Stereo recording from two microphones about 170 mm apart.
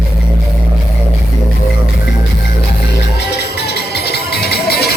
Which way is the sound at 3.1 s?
75° left (ahead or behind).